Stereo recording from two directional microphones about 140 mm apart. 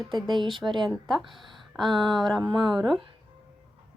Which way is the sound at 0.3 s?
35° right (ahead or behind).